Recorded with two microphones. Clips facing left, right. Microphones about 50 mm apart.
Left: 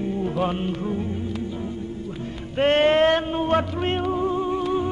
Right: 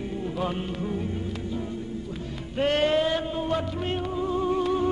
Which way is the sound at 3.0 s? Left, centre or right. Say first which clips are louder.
Left 6 dB; left.